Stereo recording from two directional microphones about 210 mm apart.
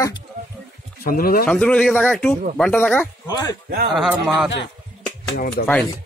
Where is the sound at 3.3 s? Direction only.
20° left (ahead or behind).